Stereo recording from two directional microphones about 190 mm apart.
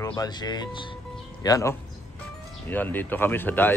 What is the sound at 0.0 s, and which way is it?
Speech, 20° left (ahead or behind).